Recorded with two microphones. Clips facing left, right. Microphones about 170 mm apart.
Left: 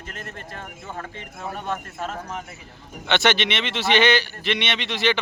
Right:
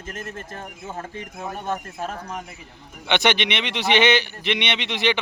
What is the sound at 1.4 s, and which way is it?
Speech, 15° right (ahead or behind).